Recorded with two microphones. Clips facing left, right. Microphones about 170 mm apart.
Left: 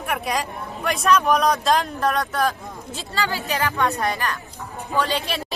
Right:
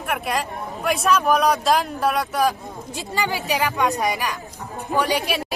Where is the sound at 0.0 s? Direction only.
Centre (ahead or behind).